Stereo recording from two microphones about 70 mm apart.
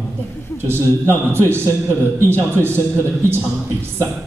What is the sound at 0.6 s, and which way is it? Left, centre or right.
A man's voice, right.